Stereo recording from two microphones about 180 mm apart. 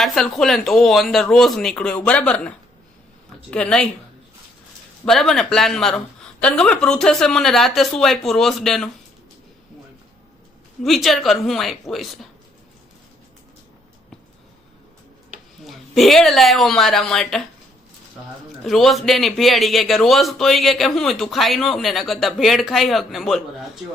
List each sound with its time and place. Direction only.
0.0 s a man's voice: centre (ahead or behind)
3.5 s a man's voice: 5° left (ahead or behind)
5.0 s a man's voice: centre (ahead or behind)
10.8 s a man's voice: centre (ahead or behind)
15.6 s a man's voice: centre (ahead or behind)
18.6 s a man's voice: centre (ahead or behind)